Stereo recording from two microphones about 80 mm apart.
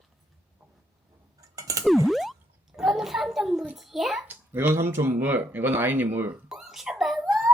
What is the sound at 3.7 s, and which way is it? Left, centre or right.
Speech, centre.